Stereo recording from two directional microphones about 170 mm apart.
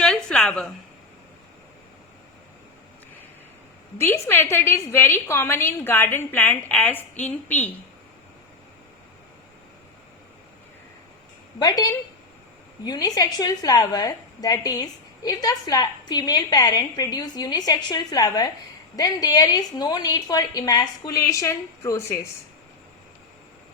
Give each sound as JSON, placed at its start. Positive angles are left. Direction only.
{"t": 0.0, "sound": "a sound", "side_deg": 5}
{"t": 3.9, "sound": "a woman's voice", "side_deg": 15}
{"t": 11.6, "sound": "a woman's voice", "side_deg": 20}